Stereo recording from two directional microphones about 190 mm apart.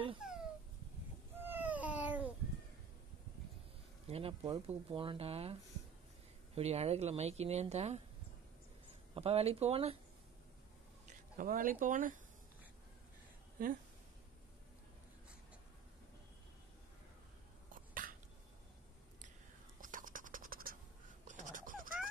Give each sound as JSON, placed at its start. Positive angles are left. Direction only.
{"t": 0.2, "sound": "a sound", "side_deg": -5}
{"t": 1.4, "sound": "a sound", "side_deg": -10}
{"t": 4.1, "sound": "a woman's voice", "side_deg": -30}
{"t": 9.1, "sound": "a woman's voice", "side_deg": -30}
{"t": 11.1, "sound": "speech", "side_deg": -45}
{"t": 13.6, "sound": "speech", "side_deg": -45}
{"t": 18.0, "sound": "a sound", "side_deg": -50}
{"t": 19.8, "sound": "scratch", "side_deg": -45}
{"t": 21.3, "sound": "fowl", "side_deg": -40}